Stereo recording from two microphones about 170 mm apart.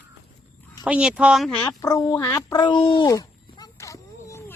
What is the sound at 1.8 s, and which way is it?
Speech, 20° left (ahead or behind).